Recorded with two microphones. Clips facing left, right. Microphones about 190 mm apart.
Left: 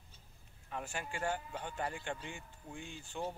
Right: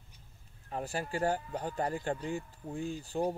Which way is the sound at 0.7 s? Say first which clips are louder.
Right 6 dB; 35° right (ahead or behind).